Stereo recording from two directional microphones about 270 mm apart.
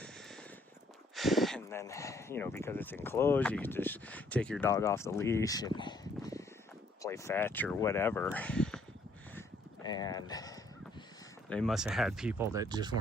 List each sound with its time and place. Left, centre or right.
1.1 s speech: centre
9.8 s speech: centre
11.4 s speech: centre